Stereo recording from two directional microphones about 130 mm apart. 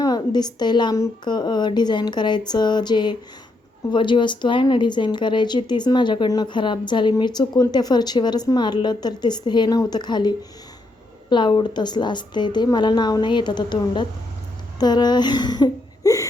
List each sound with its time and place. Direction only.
0.0 s a woman's voice: 30° left (ahead or behind)